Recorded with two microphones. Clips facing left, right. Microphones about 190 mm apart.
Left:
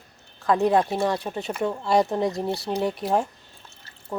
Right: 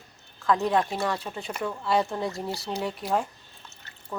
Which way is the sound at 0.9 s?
25° left (ahead or behind).